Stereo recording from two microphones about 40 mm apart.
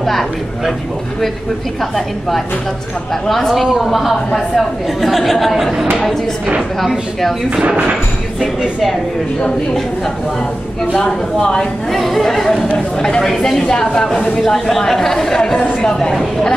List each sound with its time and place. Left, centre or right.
0.0 s speech: centre
3.3 s speech: centre
8.4 s speech: centre
11.0 s a woman's voice: centre
11.9 s a woman's voice: centre